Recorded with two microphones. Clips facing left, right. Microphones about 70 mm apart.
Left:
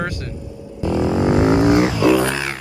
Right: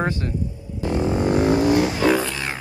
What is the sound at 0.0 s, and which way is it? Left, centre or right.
Speech, right.